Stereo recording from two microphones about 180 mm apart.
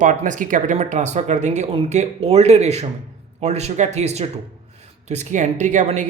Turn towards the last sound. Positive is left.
turn(degrees=-40)  # may be behind; listen again after turning